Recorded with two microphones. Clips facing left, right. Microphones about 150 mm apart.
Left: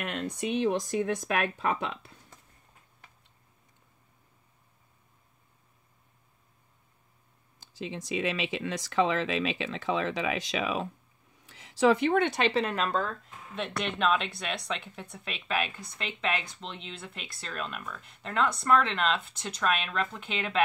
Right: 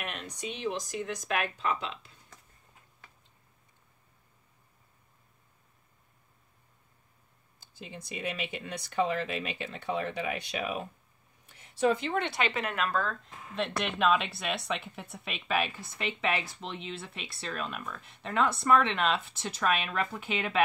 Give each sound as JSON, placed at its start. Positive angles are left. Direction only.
{"t": 0.4, "sound": "speech", "side_deg": 55}
{"t": 7.6, "sound": "speech", "side_deg": 90}
{"t": 11.4, "sound": "a sound", "side_deg": 90}
{"t": 12.4, "sound": "speech", "side_deg": 30}
{"t": 13.6, "sound": "speech", "side_deg": 0}